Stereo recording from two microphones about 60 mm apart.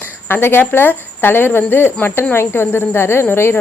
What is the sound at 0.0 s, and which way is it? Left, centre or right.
A woman's voice, left.